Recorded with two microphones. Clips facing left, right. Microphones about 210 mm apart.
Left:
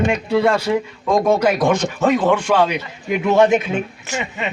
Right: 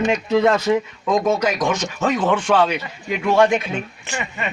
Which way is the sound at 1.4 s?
55° left (ahead or behind).